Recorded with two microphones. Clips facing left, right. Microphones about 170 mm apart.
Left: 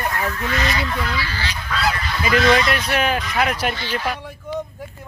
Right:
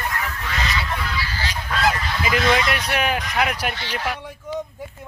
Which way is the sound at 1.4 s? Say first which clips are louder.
Right 2 dB; 45° right (ahead or behind).